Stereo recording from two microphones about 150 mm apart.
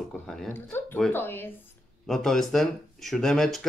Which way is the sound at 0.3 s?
5° left (ahead or behind).